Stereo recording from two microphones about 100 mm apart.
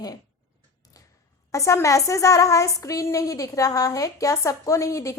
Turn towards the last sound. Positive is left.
turn(degrees=30)  # may be behind; listen again after turning